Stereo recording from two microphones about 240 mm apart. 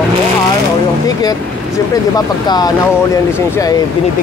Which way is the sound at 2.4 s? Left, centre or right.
Centre.